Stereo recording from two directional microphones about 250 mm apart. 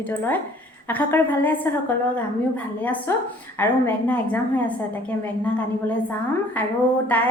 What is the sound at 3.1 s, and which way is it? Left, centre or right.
A woman's voice, centre.